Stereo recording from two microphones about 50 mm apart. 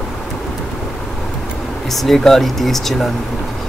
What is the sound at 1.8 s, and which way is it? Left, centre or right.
Speech, centre.